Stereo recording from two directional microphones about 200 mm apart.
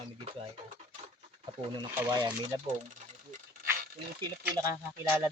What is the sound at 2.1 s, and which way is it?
Speech, 20° right (ahead or behind).